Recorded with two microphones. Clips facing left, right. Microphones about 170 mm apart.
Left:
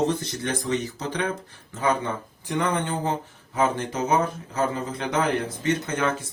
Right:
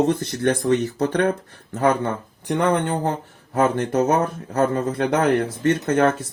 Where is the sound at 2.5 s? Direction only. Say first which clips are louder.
Right 5 dB; 60° right (ahead or behind).